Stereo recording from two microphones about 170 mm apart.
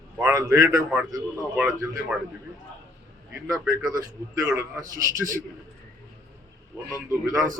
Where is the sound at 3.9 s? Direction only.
20° right (ahead or behind).